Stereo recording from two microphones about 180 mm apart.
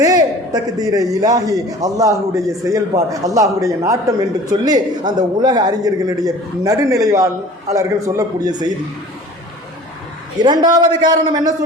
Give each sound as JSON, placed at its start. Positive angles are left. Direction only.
{"t": 0.0, "sound": "a man's voice", "side_deg": -20}
{"t": 10.7, "sound": "a man's voice", "side_deg": -25}